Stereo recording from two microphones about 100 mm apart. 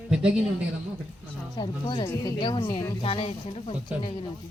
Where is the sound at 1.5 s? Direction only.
50° left (ahead or behind).